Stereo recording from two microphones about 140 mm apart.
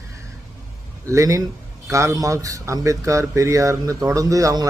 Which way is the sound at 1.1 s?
25° right (ahead or behind).